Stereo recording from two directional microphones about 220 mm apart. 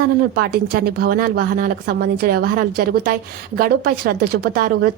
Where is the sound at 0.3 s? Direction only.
45° right (ahead or behind).